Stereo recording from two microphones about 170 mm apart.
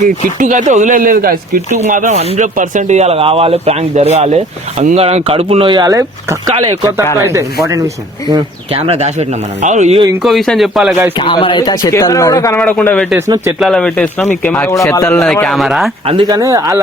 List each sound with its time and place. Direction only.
0.3 s speech: 45° right (ahead or behind); by 7.4 s 15° right (ahead or behind)
8.3 s speech: 30° right (ahead or behind)
10.2 s speech: centre (ahead or behind)
11.2 s speech: 30° left (ahead or behind); by 13.1 s 5° left (ahead or behind)
13.1 s speech: 15° right (ahead or behind)
13.6 s speech: 5° left (ahead or behind)
16.0 s speech: 30° right (ahead or behind)
16.3 s speech: 20° right (ahead or behind)